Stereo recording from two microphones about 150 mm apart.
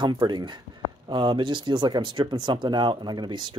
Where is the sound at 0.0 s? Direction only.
30° right (ahead or behind).